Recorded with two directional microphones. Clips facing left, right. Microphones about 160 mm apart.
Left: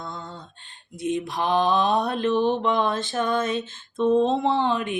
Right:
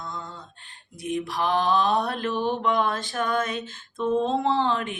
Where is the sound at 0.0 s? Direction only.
30° left (ahead or behind).